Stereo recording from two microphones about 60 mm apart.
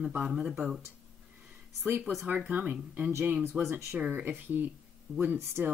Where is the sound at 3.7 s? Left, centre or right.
Right.